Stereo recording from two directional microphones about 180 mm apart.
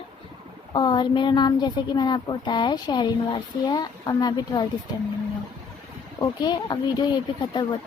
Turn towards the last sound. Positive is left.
turn(degrees=25)  # may be behind; listen again after turning